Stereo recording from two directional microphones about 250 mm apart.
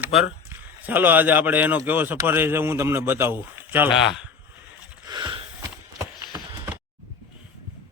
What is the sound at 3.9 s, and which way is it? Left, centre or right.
Speech, left.